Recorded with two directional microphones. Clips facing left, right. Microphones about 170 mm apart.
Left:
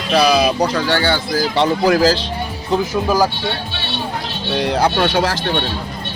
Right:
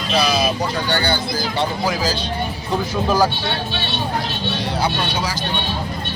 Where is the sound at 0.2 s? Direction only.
65° left (ahead or behind); by 1.2 s 90° left.